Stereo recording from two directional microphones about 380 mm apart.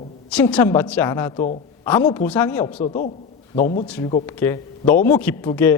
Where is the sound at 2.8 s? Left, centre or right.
Centre.